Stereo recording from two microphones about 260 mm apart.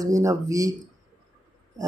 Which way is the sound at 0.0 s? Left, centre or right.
Centre.